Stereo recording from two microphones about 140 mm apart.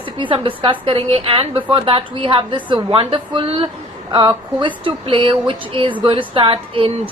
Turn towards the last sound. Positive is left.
turn(degrees=-40)  # may be behind; listen again after turning